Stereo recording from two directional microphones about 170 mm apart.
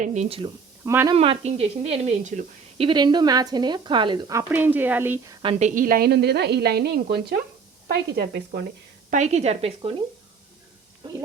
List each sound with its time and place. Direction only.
0.0 s speech: 45° right (ahead or behind)
0.9 s a woman's voice: 15° right (ahead or behind)
1.1 s speech: 35° right (ahead or behind)
2.7 s speech: 30° right (ahead or behind)
5.4 s a woman's voice: 35° right (ahead or behind); by 8.6 s 70° right (ahead or behind)
9.0 s speech: 45° right (ahead or behind)